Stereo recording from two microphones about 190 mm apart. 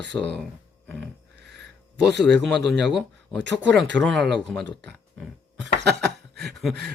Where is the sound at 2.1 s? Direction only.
65° right (ahead or behind).